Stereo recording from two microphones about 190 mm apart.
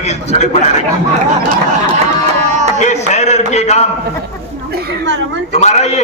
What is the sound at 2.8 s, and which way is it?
A man's voice, 35° left (ahead or behind).